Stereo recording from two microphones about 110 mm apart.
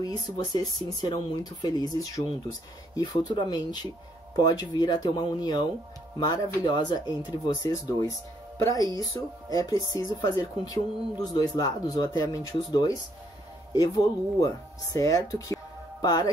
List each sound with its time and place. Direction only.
0.0 s speech: 35° left (ahead or behind)
8.5 s speech: 35° left (ahead or behind)